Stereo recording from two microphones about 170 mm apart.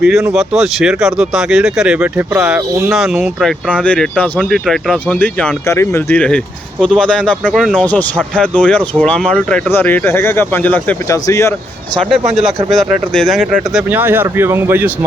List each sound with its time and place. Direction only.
0.3 s speech: 5° right (ahead or behind); by 11.5 s 15° left (ahead or behind)
11.9 s speech: centre (ahead or behind)
13.5 s speech: 10° right (ahead or behind)